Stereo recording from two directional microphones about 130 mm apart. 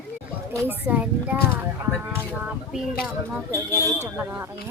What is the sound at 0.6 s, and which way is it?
Speech, 15° right (ahead or behind).